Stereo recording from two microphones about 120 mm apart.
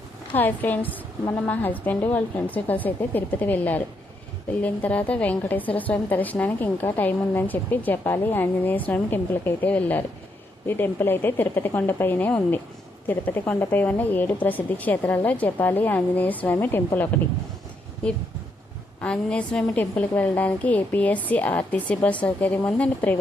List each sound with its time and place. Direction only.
0.3 s a woman's voice: 15° left (ahead or behind)
19.0 s a woman's voice: 10° left (ahead or behind)